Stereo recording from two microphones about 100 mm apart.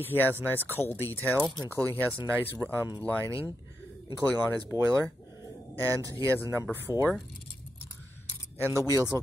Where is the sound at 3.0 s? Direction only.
15° left (ahead or behind).